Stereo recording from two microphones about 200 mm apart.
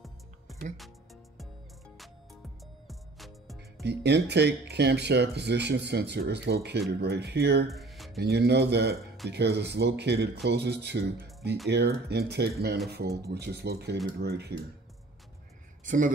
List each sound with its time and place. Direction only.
2.9 s music: centre (ahead or behind)
3.8 s speech: 60° right (ahead or behind)
7.7 s a sound: centre (ahead or behind)
8.2 s mantra: 55° right (ahead or behind)
9.3 s speech: 55° right (ahead or behind)
14.2 s mantra: 55° right (ahead or behind)
15.8 s speech: 40° right (ahead or behind)